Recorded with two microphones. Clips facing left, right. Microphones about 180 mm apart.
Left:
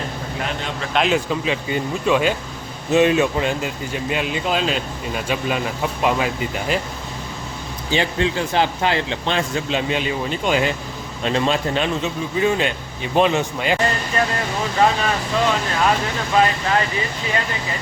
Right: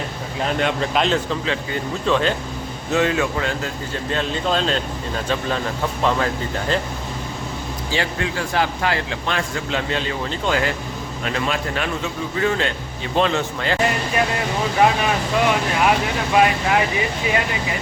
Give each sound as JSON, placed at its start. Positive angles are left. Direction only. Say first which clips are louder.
{"t": 0.9, "sound": "speech", "louder": "left 6 dB", "side_deg": 10}
{"t": 7.9, "sound": "speech", "louder": "left 4 dB", "side_deg": 20}
{"t": 14.2, "sound": "speech", "louder": "even", "side_deg": -10}